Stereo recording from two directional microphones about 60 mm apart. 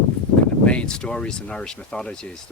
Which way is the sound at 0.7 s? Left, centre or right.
Centre.